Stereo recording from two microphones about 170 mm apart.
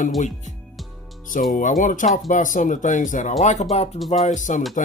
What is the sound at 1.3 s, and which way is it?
Speech, 55° left (ahead or behind).